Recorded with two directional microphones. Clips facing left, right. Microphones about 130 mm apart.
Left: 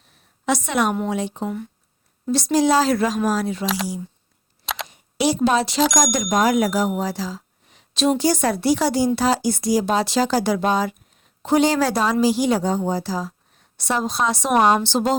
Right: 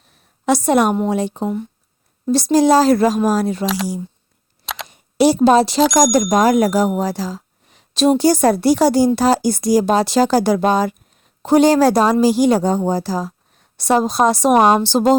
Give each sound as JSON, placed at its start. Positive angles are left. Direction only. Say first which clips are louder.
{"t": 0.4, "sound": "speech", "louder": "right 6 dB", "side_deg": -40}
{"t": 4.6, "sound": "camera", "louder": "even", "side_deg": 0}
{"t": 4.9, "sound": "speech", "louder": "right 7 dB", "side_deg": -40}